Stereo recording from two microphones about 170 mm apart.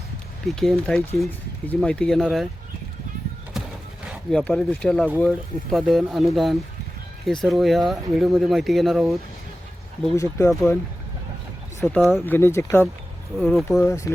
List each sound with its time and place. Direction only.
0.4 s speech: centre (ahead or behind)
4.3 s speech: 5° left (ahead or behind)
10.2 s speech: 15° left (ahead or behind)
11.8 s speech: 10° left (ahead or behind)
13.3 s speech: centre (ahead or behind)
13.7 s speech: 15° left (ahead or behind)